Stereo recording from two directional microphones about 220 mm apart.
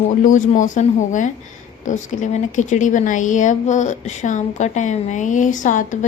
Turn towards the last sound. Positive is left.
turn(degrees=35)  # may be behind; listen again after turning